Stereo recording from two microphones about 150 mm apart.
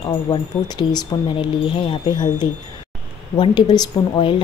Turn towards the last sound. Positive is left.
turn(degrees=30)  # may be behind; listen again after turning